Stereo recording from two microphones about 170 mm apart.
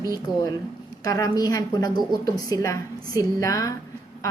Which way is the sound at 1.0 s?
20° left (ahead or behind).